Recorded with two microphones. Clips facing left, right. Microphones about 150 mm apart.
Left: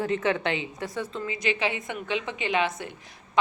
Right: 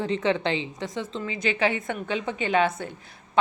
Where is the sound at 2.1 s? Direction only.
40° right (ahead or behind).